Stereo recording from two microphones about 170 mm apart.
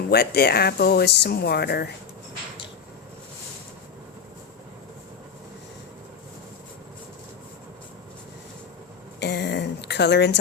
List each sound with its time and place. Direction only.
0.1 s speech: 70° left (ahead or behind)
9.2 s speech: 85° left